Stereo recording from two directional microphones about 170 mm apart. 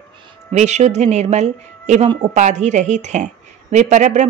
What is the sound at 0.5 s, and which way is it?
Speech, 40° right (ahead or behind).